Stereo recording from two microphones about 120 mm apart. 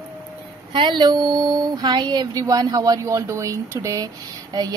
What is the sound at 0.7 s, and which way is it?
A woman's voice, 40° right (ahead or behind).